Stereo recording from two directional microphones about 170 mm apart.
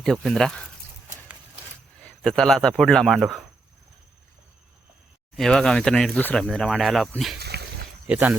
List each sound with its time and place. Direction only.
0.0 s speech: 5° left (ahead or behind)
2.0 s speech: 5° left (ahead or behind)
5.4 s speech: 5° left (ahead or behind)
7.3 s a sound: 70° right (ahead or behind)
8.0 s speech: 10° right (ahead or behind)